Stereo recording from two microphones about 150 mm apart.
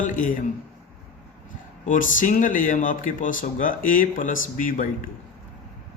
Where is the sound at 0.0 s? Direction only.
60° left (ahead or behind).